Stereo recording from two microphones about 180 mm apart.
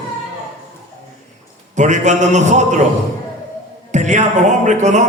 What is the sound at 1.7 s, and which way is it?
A man's voice, 40° right (ahead or behind).